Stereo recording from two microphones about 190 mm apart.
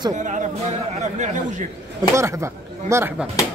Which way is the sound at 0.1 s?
40° right (ahead or behind).